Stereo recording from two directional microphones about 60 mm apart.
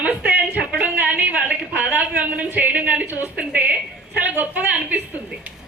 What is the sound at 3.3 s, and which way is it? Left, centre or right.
Speech, right.